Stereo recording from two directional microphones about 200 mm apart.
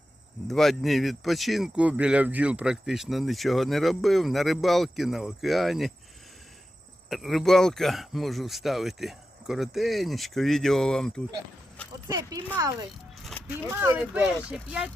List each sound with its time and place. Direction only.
0.4 s speech: centre (ahead or behind)
7.1 s speech: centre (ahead or behind)
12.0 s speech: 20° right (ahead or behind)